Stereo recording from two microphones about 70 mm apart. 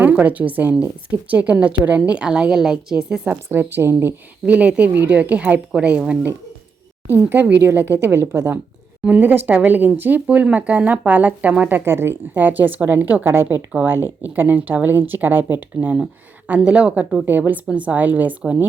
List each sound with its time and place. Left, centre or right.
0.0 s a woman's voice: right
3.2 s a woman's voice: right
4.4 s a woman's voice: right
7.3 s a woman's voice: right
9.0 s a woman's voice: right
11.9 s a woman's voice: right
16.6 s a woman's voice: centre